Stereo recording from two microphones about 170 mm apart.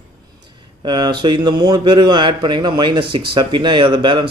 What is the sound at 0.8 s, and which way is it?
Speech, 25° right (ahead or behind).